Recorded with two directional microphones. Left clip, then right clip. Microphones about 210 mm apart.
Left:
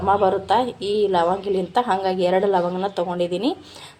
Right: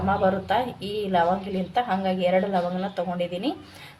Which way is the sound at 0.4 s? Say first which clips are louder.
Left 5 dB; 30° left (ahead or behind).